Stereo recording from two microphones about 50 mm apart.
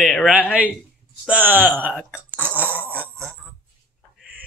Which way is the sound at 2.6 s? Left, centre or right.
Right.